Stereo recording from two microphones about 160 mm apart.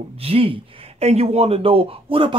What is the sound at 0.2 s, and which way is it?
Speech, 35° right (ahead or behind).